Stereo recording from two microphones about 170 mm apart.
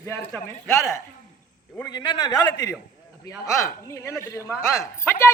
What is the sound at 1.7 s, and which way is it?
A man's voice, 20° left (ahead or behind).